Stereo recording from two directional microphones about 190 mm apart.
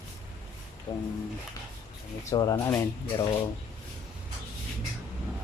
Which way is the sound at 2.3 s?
20° left (ahead or behind).